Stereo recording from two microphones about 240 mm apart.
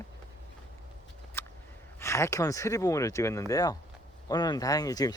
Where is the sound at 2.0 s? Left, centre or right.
Centre.